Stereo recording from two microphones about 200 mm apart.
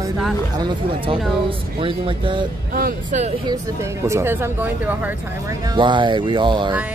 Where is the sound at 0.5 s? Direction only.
20° right (ahead or behind).